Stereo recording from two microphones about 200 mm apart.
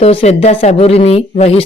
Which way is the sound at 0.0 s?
30° left (ahead or behind).